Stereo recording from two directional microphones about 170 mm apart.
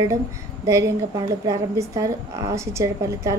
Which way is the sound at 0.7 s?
20° right (ahead or behind).